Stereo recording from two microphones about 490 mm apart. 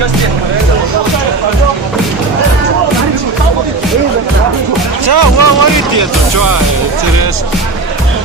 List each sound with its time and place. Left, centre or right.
5.0 s music: right
6.3 s speech: right